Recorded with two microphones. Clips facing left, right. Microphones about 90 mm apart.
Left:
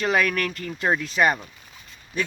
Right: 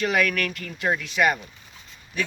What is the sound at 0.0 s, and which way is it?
Speech, 35° left (ahead or behind).